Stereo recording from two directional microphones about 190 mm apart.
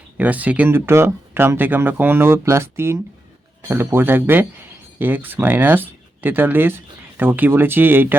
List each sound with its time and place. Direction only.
0.2 s speech: 10° right (ahead or behind)